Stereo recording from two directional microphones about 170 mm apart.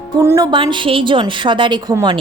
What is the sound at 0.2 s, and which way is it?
A woman's voice, 20° right (ahead or behind).